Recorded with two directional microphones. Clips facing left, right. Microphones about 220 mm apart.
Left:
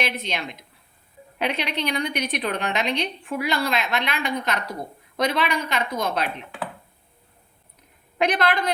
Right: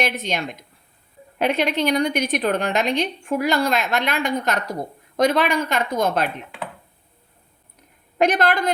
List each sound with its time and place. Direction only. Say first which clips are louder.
0.0 s a woman's voice: right 4 dB; 45° right (ahead or behind)
8.2 s a woman's voice: right 3 dB; 45° right (ahead or behind)